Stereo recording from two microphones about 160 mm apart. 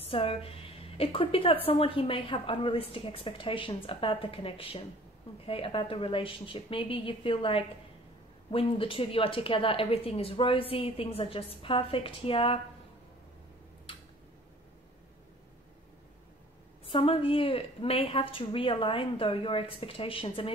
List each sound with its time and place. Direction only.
0.0 s a woman's voice: 35° left (ahead or behind)
16.9 s a woman's voice: 35° left (ahead or behind)